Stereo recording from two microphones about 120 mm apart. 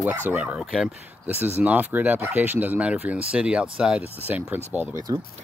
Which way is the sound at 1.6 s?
15° right (ahead or behind).